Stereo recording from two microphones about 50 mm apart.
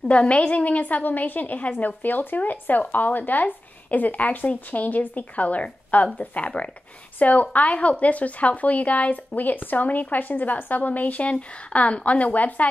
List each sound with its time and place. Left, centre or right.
0.1 s speech: left